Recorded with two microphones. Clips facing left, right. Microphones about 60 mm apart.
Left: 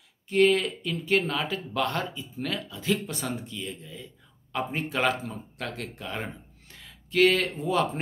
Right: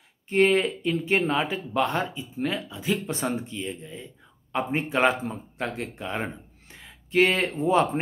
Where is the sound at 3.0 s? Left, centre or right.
Right.